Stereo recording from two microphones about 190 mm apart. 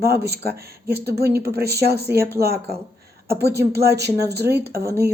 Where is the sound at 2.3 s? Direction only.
55° right (ahead or behind).